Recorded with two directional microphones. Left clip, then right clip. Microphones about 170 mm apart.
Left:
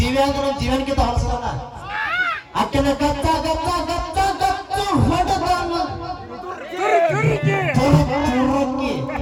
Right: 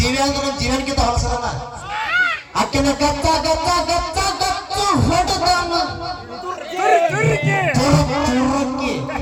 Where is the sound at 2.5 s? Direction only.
35° right (ahead or behind).